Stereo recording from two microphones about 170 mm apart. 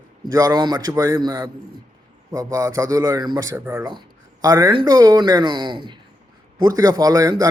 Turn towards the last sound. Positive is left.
turn(degrees=-20)  # may be behind; listen again after turning